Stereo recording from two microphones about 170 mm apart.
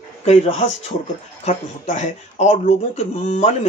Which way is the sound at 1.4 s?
45° left (ahead or behind).